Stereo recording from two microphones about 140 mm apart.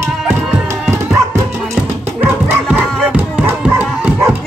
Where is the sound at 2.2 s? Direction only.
10° right (ahead or behind).